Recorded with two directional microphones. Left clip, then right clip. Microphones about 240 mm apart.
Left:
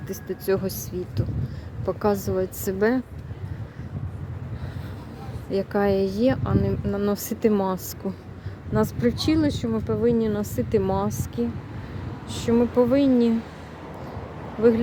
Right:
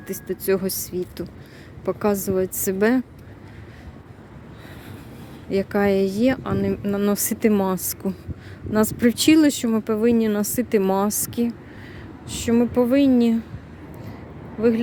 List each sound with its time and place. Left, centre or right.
0.1 s speech: centre
5.5 s speech: centre